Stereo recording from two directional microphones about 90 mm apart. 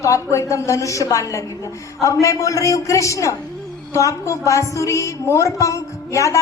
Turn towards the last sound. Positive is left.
turn(degrees=35)  # may be behind; listen again after turning